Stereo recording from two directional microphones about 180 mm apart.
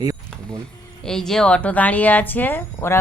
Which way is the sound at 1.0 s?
5° left (ahead or behind).